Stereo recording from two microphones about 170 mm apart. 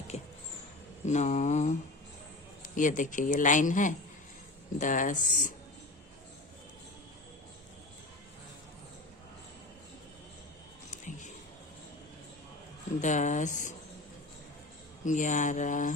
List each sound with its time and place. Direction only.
0.1 s a sound: 40° left (ahead or behind)
1.0 s a man's voice: 45° left (ahead or behind)
2.7 s a man's voice: 50° left (ahead or behind)
10.9 s a sound: 45° left (ahead or behind)
13.0 s a man's voice: 45° left (ahead or behind)
15.0 s a man's voice: 45° left (ahead or behind)